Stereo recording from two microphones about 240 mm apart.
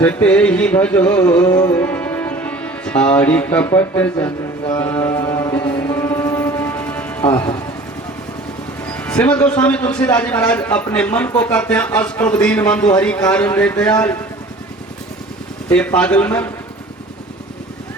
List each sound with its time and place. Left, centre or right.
0.0 s a man's voice: centre
1.5 s music: centre
4.8 s mantra: centre
5.9 s music: centre
7.3 s speech: centre
8.9 s a man's voice: centre
15.7 s a man's voice: centre